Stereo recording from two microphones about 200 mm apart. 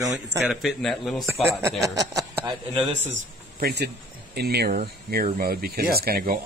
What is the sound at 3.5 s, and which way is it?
Speech, 50° right (ahead or behind).